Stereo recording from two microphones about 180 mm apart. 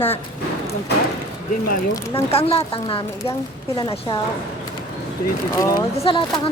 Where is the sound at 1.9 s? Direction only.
20° left (ahead or behind).